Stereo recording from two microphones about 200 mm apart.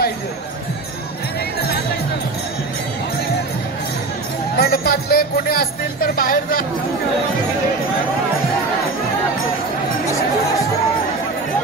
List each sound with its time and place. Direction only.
4.6 s speech: 50° left (ahead or behind)